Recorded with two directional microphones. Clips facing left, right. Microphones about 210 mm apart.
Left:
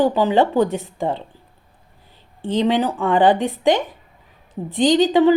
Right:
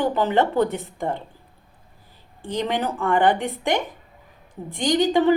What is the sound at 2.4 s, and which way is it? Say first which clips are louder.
A woman's voice: left 6 dB; 20° left (ahead or behind).